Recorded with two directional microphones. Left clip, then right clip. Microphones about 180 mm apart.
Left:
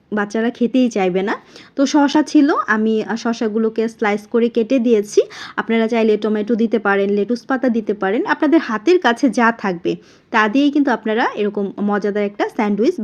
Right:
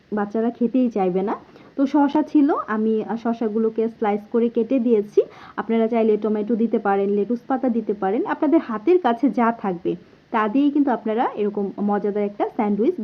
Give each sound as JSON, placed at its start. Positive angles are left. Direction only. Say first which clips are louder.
{"t": 0.1, "sound": "speech", "louder": "left 4 dB", "side_deg": 30}